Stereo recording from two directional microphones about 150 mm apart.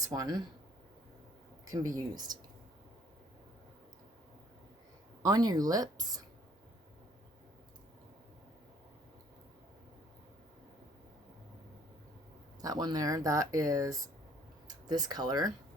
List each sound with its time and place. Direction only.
0.0 s speech: 25° right (ahead or behind)
1.6 s speech: 20° right (ahead or behind)
5.2 s speech: 25° right (ahead or behind)
12.6 s speech: 25° right (ahead or behind)